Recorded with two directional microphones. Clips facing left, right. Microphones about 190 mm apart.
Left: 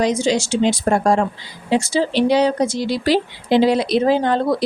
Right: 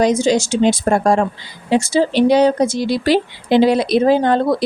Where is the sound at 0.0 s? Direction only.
45° right (ahead or behind).